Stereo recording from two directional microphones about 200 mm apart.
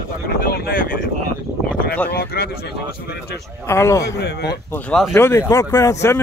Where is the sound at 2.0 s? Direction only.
50° left (ahead or behind).